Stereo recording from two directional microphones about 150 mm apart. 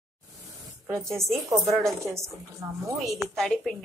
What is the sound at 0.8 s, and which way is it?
Speech, 20° right (ahead or behind).